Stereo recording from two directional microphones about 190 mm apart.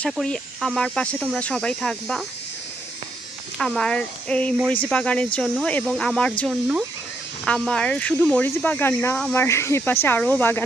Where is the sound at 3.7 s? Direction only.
5° left (ahead or behind).